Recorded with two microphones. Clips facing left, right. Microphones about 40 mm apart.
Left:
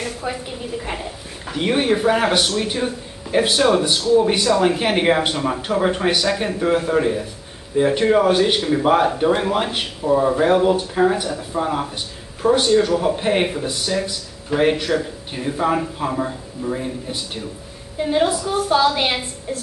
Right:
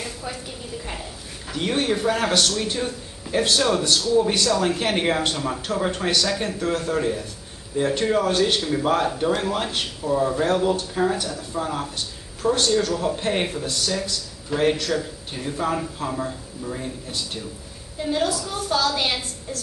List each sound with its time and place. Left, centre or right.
0.2 s a woman's voice: left